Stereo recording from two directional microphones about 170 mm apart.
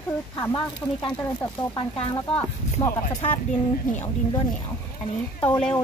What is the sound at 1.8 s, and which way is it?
Speech, 25° left (ahead or behind).